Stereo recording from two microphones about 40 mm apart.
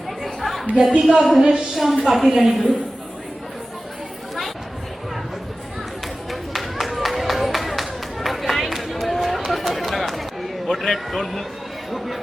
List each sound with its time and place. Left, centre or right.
0.2 s chatter: centre
0.8 s speech: right
1.2 s a man's voice: centre
6.3 s a sound: centre
10.7 s a man's voice: centre